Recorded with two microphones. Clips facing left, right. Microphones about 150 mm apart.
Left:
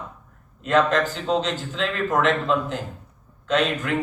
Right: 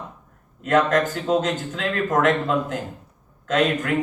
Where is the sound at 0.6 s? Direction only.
45° right (ahead or behind).